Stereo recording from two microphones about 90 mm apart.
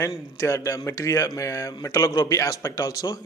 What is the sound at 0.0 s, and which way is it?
Speech, 40° left (ahead or behind).